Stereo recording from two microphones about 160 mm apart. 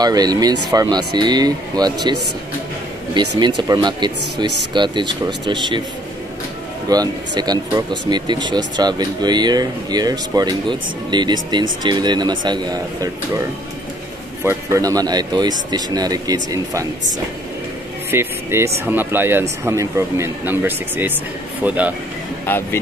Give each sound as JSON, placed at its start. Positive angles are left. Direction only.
{"t": 0.0, "sound": "speech", "side_deg": -25}
{"t": 3.2, "sound": "speech", "side_deg": -30}
{"t": 6.9, "sound": "speech", "side_deg": -25}
{"t": 14.4, "sound": "speech", "side_deg": -15}
{"t": 18.1, "sound": "speech", "side_deg": -15}
{"t": 22.5, "sound": "speech", "side_deg": 10}